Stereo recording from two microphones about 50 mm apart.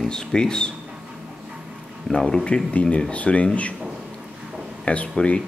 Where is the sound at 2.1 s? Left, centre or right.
Centre.